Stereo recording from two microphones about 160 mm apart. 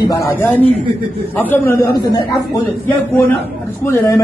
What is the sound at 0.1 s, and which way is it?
A man's voice, 15° left (ahead or behind).